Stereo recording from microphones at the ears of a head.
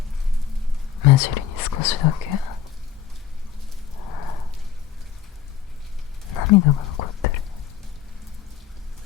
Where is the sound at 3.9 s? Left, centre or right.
Left.